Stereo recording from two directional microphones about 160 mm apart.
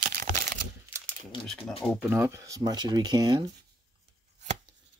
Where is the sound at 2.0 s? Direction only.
15° right (ahead or behind).